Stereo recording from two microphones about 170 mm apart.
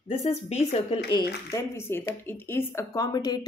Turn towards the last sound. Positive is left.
turn(degrees=25)  # may be behind; listen again after turning